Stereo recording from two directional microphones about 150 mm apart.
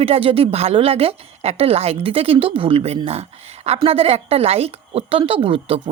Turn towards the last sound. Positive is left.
turn(degrees=-40)  # may be behind; listen again after turning